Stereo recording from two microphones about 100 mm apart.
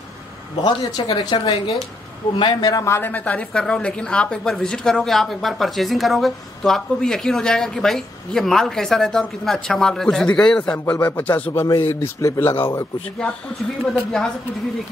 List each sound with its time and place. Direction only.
0.7 s speech: 50° left (ahead or behind)
3.0 s speech: 15° left (ahead or behind)
11.9 s speech: 30° left (ahead or behind)
12.4 s speech: 20° left (ahead or behind)
13.9 s a woman's voice: 5° left (ahead or behind)